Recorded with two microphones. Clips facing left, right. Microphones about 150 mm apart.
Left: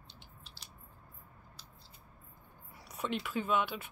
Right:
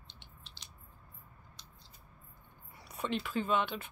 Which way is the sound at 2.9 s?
5° left (ahead or behind).